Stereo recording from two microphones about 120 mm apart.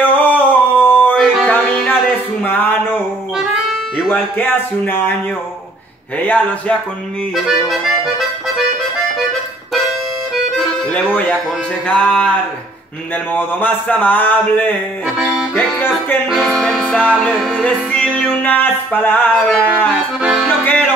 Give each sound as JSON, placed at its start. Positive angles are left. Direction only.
{"t": 0.0, "sound": "a sound", "side_deg": 15}
{"t": 1.1, "sound": "music", "side_deg": -5}
{"t": 1.5, "sound": "music", "side_deg": 10}
{"t": 4.4, "sound": "speech", "side_deg": 15}
{"t": 6.1, "sound": "speech", "side_deg": 10}
{"t": 7.3, "sound": "accordion", "side_deg": -5}
{"t": 10.9, "sound": "speech", "side_deg": 15}
{"t": 16.3, "sound": "music", "side_deg": 0}
{"t": 17.0, "sound": "music", "side_deg": -10}
{"t": 17.6, "sound": "music", "side_deg": 10}
{"t": 19.4, "sound": "speech", "side_deg": 10}
{"t": 20.2, "sound": "accordion", "side_deg": -5}
{"t": 20.4, "sound": "music", "side_deg": 15}